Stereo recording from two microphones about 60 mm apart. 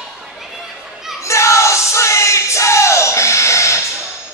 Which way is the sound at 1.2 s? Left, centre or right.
Left.